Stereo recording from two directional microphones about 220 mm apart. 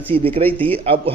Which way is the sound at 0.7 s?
25° right (ahead or behind).